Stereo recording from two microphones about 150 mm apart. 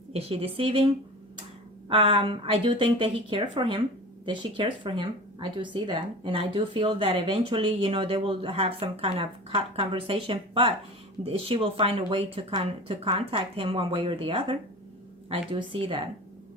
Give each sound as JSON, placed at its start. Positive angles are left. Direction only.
{"t": 0.1, "sound": "speech", "side_deg": -40}
{"t": 1.9, "sound": "speech", "side_deg": -40}